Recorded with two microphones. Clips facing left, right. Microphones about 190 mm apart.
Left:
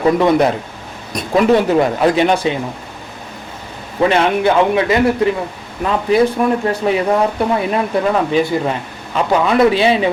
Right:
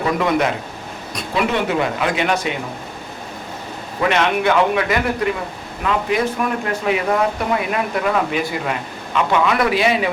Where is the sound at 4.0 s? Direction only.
30° left (ahead or behind).